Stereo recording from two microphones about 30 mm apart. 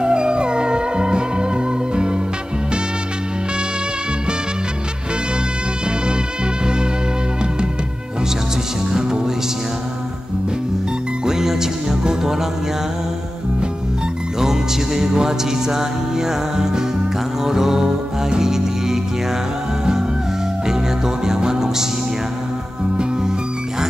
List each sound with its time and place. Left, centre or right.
0.0 s music: right
8.9 s music: right
11.2 s music: centre
14.4 s music: centre
21.2 s music: centre